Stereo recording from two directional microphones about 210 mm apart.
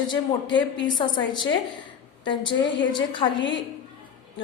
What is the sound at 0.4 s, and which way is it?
Speech, 60° left (ahead or behind).